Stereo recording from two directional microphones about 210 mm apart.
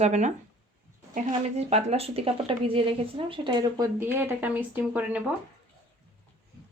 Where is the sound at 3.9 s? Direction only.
10° right (ahead or behind).